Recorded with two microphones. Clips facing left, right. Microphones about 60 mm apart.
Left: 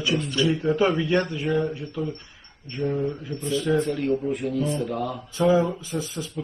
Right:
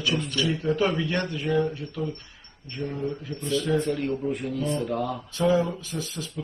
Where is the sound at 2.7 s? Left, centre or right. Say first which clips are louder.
Left 4 dB; centre.